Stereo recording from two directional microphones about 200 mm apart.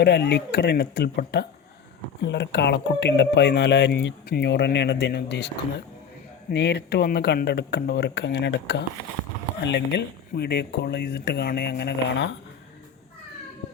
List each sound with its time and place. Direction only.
0.0 s speech: 55° left (ahead or behind)
6.5 s speech: 55° left (ahead or behind)